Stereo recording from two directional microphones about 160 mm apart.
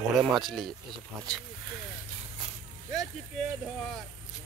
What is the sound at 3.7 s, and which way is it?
Speech, 5° left (ahead or behind).